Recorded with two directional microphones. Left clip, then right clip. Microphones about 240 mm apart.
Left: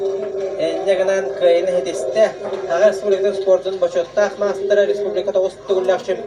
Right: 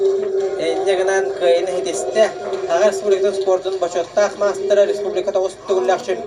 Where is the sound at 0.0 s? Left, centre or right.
Right.